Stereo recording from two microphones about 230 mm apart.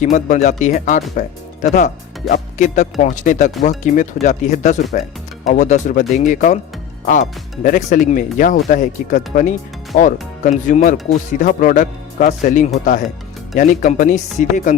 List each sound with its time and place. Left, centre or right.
0.0 s speech: left